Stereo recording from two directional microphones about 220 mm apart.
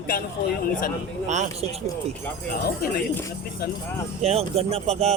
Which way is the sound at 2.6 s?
40° left (ahead or behind).